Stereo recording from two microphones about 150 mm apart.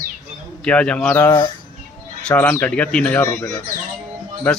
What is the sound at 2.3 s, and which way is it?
Speech, 10° left (ahead or behind).